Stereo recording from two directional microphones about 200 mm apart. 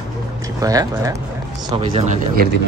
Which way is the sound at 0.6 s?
15° right (ahead or behind).